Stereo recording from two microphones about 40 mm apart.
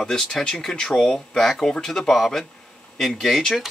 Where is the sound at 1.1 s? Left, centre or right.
Centre.